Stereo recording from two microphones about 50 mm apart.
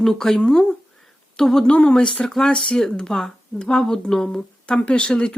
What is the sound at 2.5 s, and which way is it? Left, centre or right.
Speech, left.